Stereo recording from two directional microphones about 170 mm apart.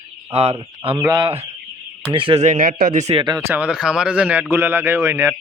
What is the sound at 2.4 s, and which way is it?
Speech, 50° right (ahead or behind).